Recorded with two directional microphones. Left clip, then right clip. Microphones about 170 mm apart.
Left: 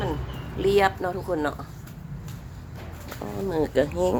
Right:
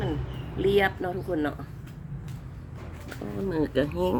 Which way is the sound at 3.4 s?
35° right (ahead or behind).